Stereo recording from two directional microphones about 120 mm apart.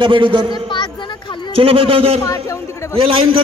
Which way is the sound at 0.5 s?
40° left (ahead or behind).